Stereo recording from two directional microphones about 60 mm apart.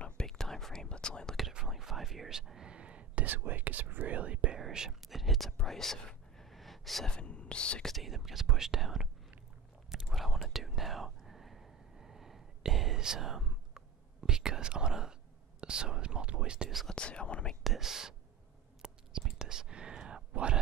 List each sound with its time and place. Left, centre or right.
0.0 s whispering: centre
1.7 s a sound: centre
2.7 s speech: centre
4.6 s whispering: centre
7.1 s a sound: centre
7.8 s speech: centre
10.0 s whispering: centre
16.9 s whispering: centre
17.5 s whispering: centre